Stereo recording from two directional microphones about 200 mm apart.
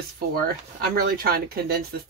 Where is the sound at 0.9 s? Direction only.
50° right (ahead or behind).